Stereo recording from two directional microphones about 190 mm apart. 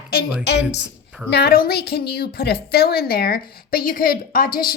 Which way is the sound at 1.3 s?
55° left (ahead or behind).